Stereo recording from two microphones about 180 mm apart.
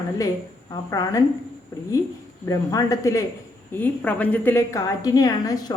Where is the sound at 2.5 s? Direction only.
20° left (ahead or behind).